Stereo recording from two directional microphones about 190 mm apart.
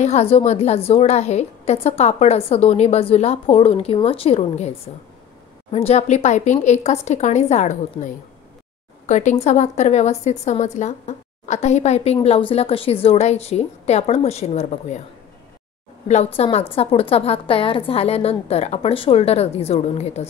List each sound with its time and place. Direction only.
0.0 s a woman's voice: 35° left (ahead or behind)
16.1 s a woman's voice: 35° left (ahead or behind)